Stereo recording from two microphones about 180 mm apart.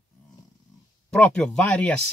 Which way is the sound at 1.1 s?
5° left (ahead or behind).